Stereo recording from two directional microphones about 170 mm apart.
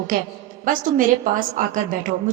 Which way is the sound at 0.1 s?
55° right (ahead or behind).